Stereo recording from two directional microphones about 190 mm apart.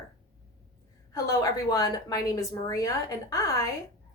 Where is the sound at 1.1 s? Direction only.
20° left (ahead or behind).